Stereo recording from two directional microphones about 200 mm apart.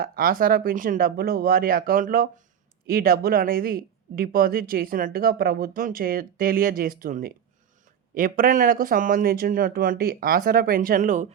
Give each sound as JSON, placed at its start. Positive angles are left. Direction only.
{"t": 0.0, "sound": "speech", "side_deg": -45}